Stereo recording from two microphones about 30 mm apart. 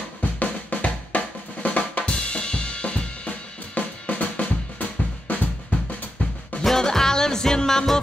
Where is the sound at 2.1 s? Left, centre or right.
Left.